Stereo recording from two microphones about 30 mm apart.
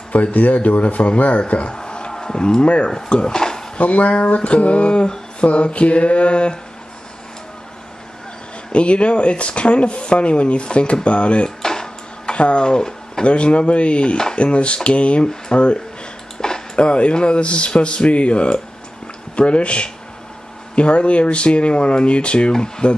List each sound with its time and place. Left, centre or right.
0.3 s speech: left
1.7 s a sound: left
2.6 s speech: left
3.3 s speech: centre
3.7 s speech: left
8.7 s speech: left
11.4 s a sound: left
12.3 s speech: left
12.6 s pigeon: left
13.2 s speech: left
16.3 s a sound: left
16.7 s speech: left